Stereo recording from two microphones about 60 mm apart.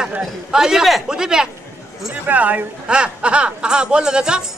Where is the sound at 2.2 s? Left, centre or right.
Right.